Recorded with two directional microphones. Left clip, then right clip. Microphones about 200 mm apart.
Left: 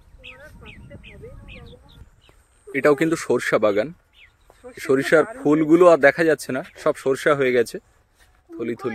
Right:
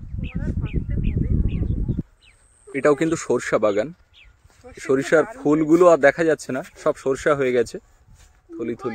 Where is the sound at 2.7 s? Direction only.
Centre (ahead or behind).